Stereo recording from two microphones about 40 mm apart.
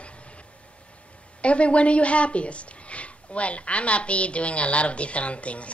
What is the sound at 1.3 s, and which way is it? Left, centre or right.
Speech, left.